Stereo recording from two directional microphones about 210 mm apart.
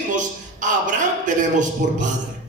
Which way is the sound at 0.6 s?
35° right (ahead or behind).